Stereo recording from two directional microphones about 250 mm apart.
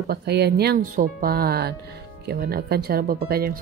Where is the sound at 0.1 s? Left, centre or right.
Right.